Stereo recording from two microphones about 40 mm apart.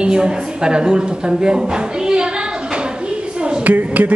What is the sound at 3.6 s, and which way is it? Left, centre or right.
Speech, right.